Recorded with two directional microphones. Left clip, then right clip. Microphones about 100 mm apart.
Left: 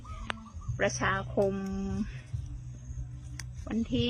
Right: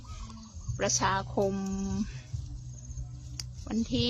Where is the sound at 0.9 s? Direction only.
10° right (ahead or behind).